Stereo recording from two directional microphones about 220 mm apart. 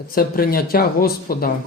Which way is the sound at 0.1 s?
40° left (ahead or behind).